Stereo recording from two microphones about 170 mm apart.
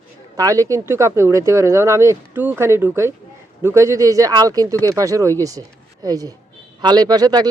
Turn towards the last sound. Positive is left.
turn(degrees=-25)  # may be behind; listen again after turning